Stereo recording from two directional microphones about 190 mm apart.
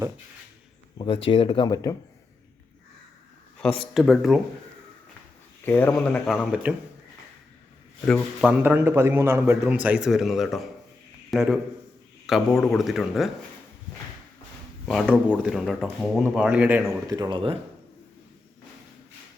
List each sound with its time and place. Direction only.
0.9 s speech: 25° left (ahead or behind)
3.6 s speech: 5° left (ahead or behind)
5.6 s speech: 10° left (ahead or behind)
8.0 s speech: 5° left (ahead or behind)
8.4 s a man's voice: 10° right (ahead or behind)
14.8 s speech: 5° right (ahead or behind); by 17.6 s 25° right (ahead or behind)